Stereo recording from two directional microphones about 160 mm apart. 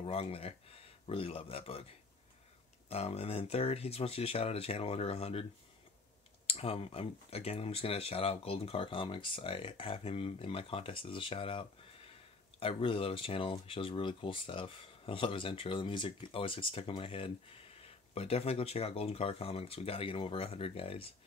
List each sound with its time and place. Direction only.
0.0 s speech: 40° left (ahead or behind)
2.9 s speech: 40° left (ahead or behind)
6.4 s speech: 40° left (ahead or behind)